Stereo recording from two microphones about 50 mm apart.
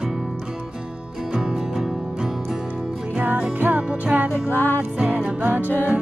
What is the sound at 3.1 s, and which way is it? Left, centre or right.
Music, right.